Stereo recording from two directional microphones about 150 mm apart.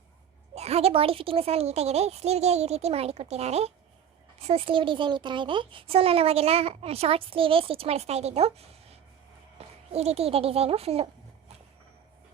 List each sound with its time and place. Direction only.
0.5 s a child's voice: 45° right (ahead or behind)